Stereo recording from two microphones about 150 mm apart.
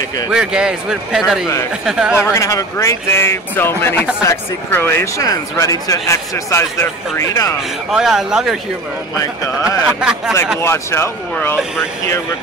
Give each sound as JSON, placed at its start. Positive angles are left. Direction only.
{"t": 0.3, "sound": "a man's voice", "side_deg": -5}
{"t": 2.3, "sound": "speech", "side_deg": 20}
{"t": 7.9, "sound": "a man's voice", "side_deg": -5}
{"t": 9.2, "sound": "speech", "side_deg": 20}
{"t": 9.9, "sound": "a man's voice", "side_deg": -5}
{"t": 10.6, "sound": "speech", "side_deg": 15}